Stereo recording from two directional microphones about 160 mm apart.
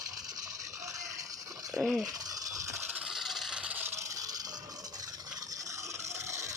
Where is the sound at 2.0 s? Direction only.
20° right (ahead or behind).